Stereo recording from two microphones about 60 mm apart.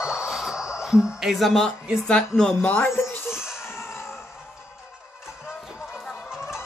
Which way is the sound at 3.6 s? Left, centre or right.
Left.